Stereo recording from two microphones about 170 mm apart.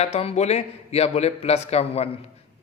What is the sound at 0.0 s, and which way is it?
Speech, 35° left (ahead or behind).